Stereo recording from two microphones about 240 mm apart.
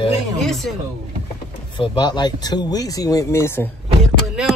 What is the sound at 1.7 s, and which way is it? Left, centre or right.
Speech, centre.